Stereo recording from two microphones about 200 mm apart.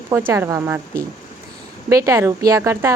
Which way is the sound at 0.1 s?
10° right (ahead or behind).